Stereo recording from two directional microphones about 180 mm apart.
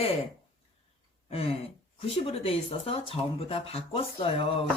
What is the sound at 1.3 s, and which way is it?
Speech, 35° left (ahead or behind).